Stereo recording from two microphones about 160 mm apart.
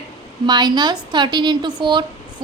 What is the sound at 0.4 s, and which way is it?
A woman's voice, 25° right (ahead or behind).